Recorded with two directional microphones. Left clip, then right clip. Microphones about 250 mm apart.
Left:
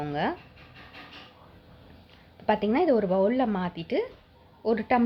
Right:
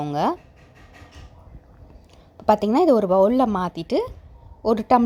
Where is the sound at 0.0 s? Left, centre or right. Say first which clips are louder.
Right 7 dB; right.